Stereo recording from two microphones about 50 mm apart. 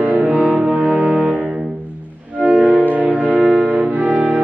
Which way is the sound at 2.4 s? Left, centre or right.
Right.